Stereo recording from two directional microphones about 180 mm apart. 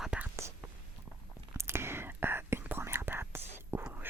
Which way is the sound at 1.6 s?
15° right (ahead or behind).